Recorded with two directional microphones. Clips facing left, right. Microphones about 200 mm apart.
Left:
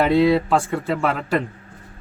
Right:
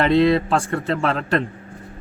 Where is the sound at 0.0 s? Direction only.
5° left (ahead or behind).